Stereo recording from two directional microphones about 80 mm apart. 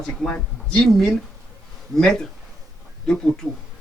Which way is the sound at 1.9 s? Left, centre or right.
Centre.